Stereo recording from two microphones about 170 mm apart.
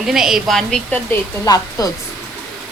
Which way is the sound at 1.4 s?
20° left (ahead or behind).